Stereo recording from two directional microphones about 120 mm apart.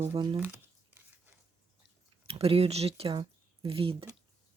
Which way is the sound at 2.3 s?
55° right (ahead or behind).